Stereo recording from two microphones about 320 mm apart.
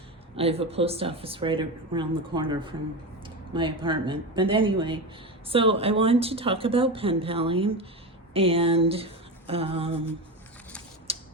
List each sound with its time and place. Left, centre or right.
0.3 s speech: centre
8.3 s a sound: centre
11.1 s tick-tock: centre